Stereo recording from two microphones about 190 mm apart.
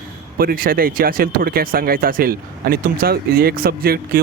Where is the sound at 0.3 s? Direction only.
50° right (ahead or behind).